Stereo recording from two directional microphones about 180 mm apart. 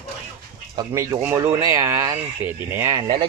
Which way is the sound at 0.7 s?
20° right (ahead or behind).